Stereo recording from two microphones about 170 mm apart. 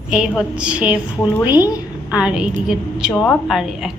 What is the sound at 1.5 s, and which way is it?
Speech, 20° left (ahead or behind).